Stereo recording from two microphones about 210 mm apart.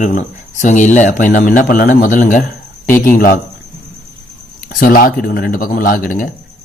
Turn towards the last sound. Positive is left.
turn(degrees=40)  # may be behind; listen again after turning